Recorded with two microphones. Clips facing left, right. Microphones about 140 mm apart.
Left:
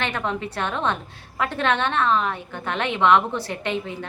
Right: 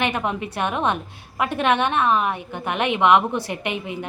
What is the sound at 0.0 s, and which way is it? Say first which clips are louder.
A woman's voice: right 2 dB; 15° right (ahead or behind).